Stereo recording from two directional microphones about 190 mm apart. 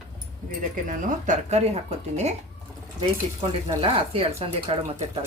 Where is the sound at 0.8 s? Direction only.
40° right (ahead or behind).